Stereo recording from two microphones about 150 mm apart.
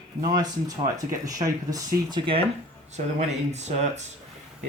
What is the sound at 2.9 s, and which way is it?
Speech, 50° right (ahead or behind).